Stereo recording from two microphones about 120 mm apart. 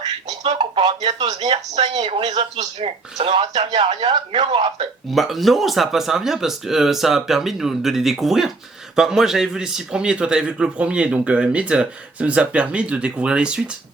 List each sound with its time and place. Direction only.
0.6 s speech: 45° right (ahead or behind)
1.4 s speech: 55° right (ahead or behind)
3.8 s speech: 45° right (ahead or behind)
5.1 s speech: centre (ahead or behind)